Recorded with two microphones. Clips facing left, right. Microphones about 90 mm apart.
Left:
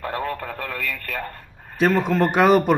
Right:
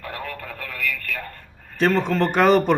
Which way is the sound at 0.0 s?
35° left (ahead or behind).